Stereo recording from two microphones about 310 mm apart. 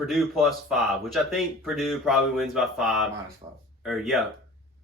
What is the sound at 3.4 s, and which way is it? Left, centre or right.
Speech, centre.